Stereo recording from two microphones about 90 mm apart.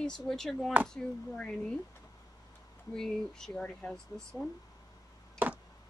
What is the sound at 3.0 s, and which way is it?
Speech, 5° left (ahead or behind).